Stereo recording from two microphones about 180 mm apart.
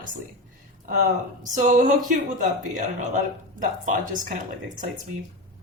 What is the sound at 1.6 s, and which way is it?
A man's voice, 45° right (ahead or behind).